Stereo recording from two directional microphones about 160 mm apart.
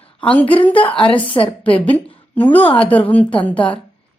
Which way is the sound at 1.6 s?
10° left (ahead or behind).